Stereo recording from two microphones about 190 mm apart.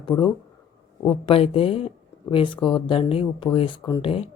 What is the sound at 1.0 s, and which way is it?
Speech, 30° left (ahead or behind).